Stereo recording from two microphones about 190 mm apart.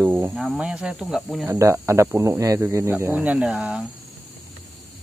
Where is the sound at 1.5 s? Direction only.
15° right (ahead or behind).